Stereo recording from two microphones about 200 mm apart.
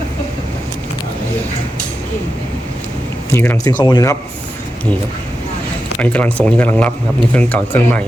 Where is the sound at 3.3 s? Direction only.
10° left (ahead or behind).